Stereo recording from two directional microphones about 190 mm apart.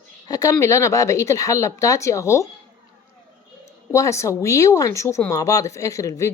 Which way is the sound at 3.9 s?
15° left (ahead or behind).